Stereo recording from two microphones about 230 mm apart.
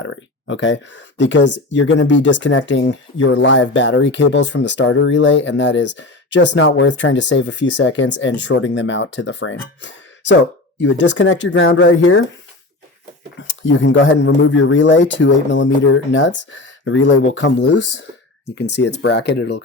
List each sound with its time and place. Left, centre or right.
0.0 s speech: left
13.5 s speech: left